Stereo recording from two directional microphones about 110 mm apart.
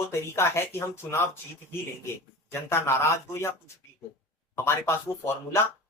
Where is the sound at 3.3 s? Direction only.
25° left (ahead or behind).